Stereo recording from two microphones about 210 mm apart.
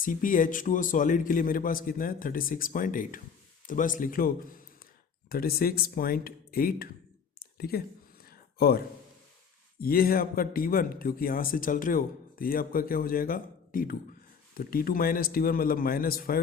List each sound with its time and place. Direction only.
0.0 s a man's voice: 40° left (ahead or behind)
7.6 s a sound: 45° left (ahead or behind)
9.8 s speech: 45° left (ahead or behind)